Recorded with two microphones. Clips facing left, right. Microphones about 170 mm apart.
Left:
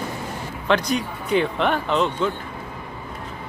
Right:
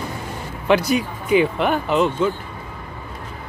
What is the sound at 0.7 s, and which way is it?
Speech, 5° right (ahead or behind).